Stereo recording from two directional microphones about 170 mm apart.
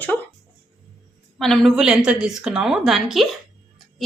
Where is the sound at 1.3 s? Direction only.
Centre (ahead or behind).